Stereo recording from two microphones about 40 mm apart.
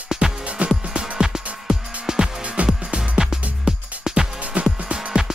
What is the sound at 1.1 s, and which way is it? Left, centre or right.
Music, centre.